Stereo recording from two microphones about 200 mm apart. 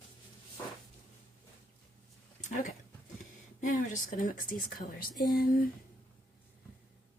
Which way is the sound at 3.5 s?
40° left (ahead or behind).